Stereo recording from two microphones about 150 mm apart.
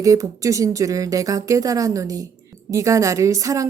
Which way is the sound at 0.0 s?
20° right (ahead or behind).